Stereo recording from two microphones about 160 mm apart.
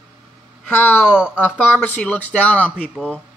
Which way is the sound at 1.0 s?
5° right (ahead or behind).